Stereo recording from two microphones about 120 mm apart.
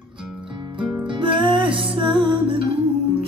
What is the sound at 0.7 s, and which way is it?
Music, 40° right (ahead or behind).